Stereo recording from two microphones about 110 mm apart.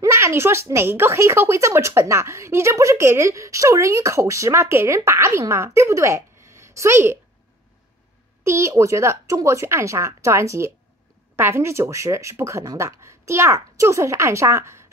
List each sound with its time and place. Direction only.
0.0 s speech: 25° right (ahead or behind)
8.5 s speech: 25° right (ahead or behind)